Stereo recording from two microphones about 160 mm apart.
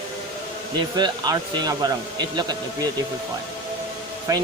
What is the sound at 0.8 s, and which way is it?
Speech, 25° right (ahead or behind).